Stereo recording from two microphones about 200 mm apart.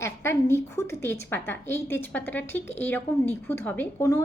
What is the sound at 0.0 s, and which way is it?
A woman's voice, 15° left (ahead or behind).